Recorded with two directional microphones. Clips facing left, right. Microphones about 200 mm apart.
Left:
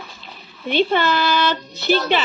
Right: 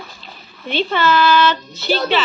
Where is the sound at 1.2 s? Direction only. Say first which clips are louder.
Right 5 dB; 50° left (ahead or behind).